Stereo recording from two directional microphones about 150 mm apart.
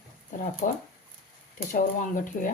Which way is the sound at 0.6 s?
65° left (ahead or behind).